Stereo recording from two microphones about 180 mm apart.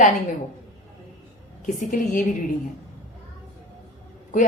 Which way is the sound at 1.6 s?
45° left (ahead or behind).